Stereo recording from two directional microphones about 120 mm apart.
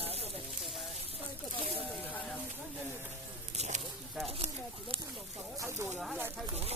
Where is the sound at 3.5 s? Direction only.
75° right (ahead or behind).